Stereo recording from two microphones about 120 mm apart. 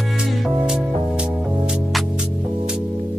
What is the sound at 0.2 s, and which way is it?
Music, 5° right (ahead or behind).